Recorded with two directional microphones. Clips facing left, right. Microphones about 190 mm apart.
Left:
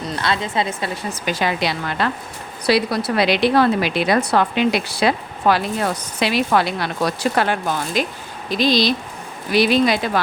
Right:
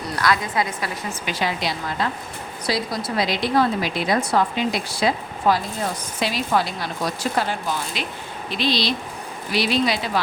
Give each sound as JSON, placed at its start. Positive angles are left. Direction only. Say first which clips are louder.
{"t": 0.0, "sound": "a woman's voice", "louder": "even", "side_deg": 25}
{"t": 1.1, "sound": "a woman's voice", "louder": "left 5 dB", "side_deg": 45}
{"t": 8.4, "sound": "a woman's voice", "louder": "left 6 dB", "side_deg": 40}